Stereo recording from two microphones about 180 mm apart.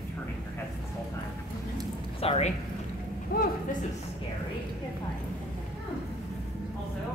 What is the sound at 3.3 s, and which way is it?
Speech, 55° left (ahead or behind).